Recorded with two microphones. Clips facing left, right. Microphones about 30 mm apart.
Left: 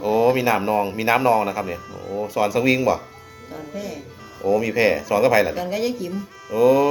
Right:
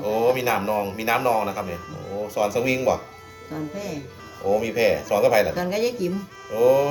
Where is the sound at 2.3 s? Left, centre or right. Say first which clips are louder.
Left 3 dB; left.